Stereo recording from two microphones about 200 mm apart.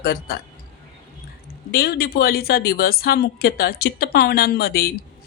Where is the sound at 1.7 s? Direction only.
50° left (ahead or behind).